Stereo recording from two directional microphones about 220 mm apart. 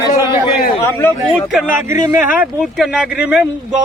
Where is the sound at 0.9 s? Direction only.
10° left (ahead or behind).